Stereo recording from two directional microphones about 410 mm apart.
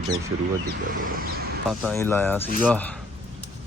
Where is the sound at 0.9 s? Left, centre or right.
Right.